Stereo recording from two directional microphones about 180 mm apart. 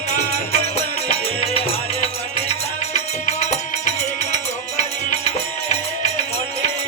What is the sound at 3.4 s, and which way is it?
Music, 40° left (ahead or behind).